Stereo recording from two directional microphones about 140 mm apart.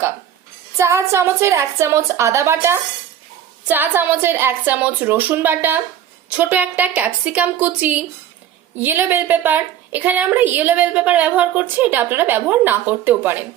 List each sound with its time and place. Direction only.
0.8 s a woman's voice: 20° right (ahead or behind)